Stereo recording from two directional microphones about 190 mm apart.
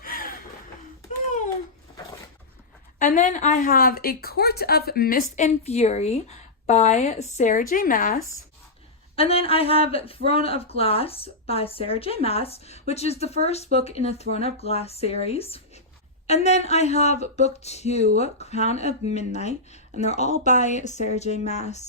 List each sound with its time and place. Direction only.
0.0 s a sound: 50° left (ahead or behind)
3.0 s speech: 40° left (ahead or behind)
9.1 s speech: 30° left (ahead or behind)